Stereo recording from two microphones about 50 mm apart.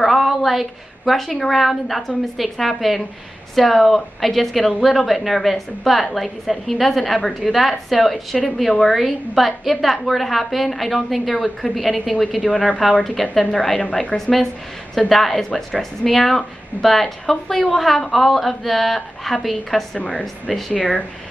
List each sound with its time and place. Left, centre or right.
0.0 s a woman's voice: centre
12.4 s speech: centre
13.0 s a woman's voice: centre
20.0 s speech: left